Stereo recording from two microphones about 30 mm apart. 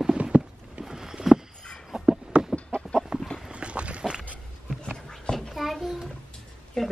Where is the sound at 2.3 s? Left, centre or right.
Right.